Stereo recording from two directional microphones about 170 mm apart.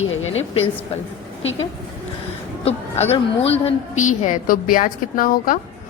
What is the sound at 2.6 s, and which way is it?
A woman's voice, 40° left (ahead or behind).